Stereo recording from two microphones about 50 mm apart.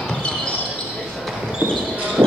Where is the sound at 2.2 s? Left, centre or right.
Right.